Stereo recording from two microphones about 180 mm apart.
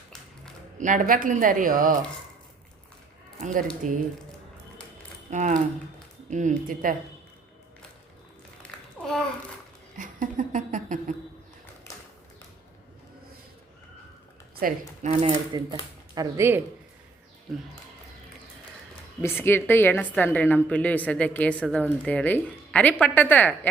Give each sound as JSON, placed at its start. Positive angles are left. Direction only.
{"t": 0.8, "sound": "a woman's voice", "side_deg": -45}
{"t": 3.8, "sound": "a woman's voice", "side_deg": -45}
{"t": 5.3, "sound": "a woman's voice", "side_deg": -45}
{"t": 8.6, "sound": "babbling", "side_deg": 5}
{"t": 10.0, "sound": "a sound", "side_deg": -45}
{"t": 14.6, "sound": "a woman's voice", "side_deg": -55}
{"t": 15.0, "sound": "speech", "side_deg": -40}
{"t": 15.5, "sound": "speech", "side_deg": -20}
{"t": 19.2, "sound": "a woman's voice", "side_deg": 10}